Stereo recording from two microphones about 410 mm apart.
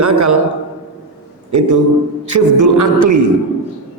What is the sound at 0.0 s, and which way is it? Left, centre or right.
Speech, right.